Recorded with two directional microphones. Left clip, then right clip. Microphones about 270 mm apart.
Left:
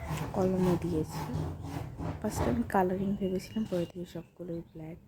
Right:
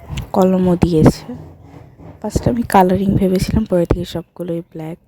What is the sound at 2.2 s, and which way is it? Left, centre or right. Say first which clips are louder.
A woman's voice: right 13 dB; right.